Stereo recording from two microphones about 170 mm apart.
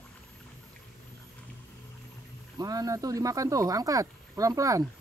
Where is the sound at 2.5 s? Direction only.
20° right (ahead or behind).